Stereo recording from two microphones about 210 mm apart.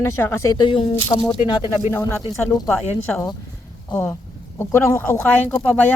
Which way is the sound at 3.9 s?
5° left (ahead or behind).